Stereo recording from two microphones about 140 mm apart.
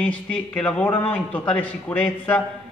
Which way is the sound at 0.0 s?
10° left (ahead or behind).